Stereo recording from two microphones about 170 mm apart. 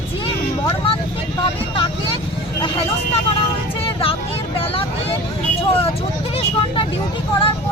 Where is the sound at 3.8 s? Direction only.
35° left (ahead or behind).